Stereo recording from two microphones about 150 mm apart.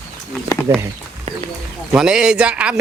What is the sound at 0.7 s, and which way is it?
Speech, 25° right (ahead or behind).